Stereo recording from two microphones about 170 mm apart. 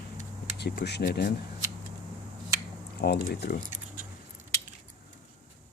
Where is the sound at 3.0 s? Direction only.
75° left (ahead or behind).